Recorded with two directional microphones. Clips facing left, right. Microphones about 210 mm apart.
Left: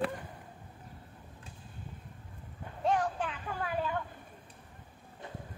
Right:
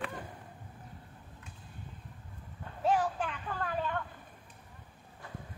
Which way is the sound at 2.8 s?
5° right (ahead or behind).